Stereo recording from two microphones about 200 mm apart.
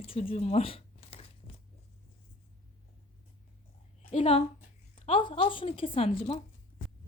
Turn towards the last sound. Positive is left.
turn(degrees=30)  # may be behind; listen again after turning